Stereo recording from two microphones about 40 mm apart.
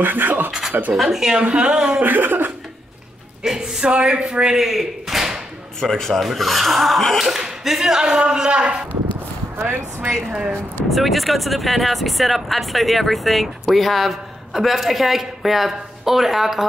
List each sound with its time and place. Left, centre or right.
0.0 s speech: right
0.5 s scratch: centre
0.9 s speech: centre
1.4 s speech: right
1.9 s speech: right
2.1 s speech: right
3.4 s speech: centre
3.8 s speech: right
4.6 s tap: centre
5.8 s speech: centre
7.2 s speech: centre; by 8.8 s right
10.9 s speech: centre